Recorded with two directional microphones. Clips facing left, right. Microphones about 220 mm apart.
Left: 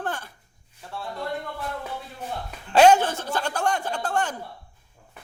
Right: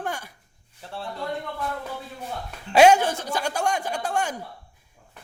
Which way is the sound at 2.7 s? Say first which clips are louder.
Even; 10° right (ahead or behind).